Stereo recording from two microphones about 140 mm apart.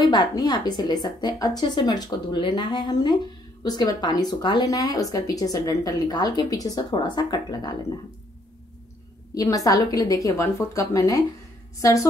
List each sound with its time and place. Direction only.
0.0 s a woman's voice: 30° left (ahead or behind)
9.3 s speech: 25° left (ahead or behind)